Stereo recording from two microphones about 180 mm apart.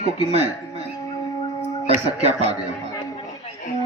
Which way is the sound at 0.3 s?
35° right (ahead or behind).